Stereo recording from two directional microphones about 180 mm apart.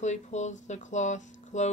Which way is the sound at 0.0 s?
40° left (ahead or behind).